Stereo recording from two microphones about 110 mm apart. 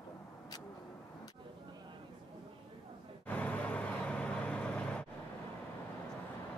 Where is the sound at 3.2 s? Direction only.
10° left (ahead or behind).